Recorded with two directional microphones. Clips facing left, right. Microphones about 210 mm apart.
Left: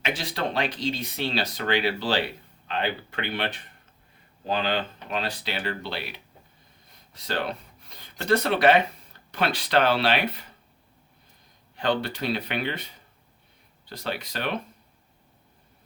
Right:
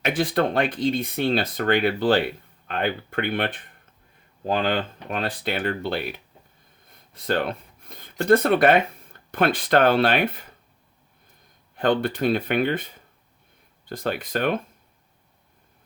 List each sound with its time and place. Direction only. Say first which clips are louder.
0.0 s speech: right 7 dB; 50° right (ahead or behind)
6.8 s a sound: right 8 dB; 55° right (ahead or behind)
9.3 s speech: right 4 dB; 50° right (ahead or behind)
11.8 s speech: right 5 dB; 50° right (ahead or behind)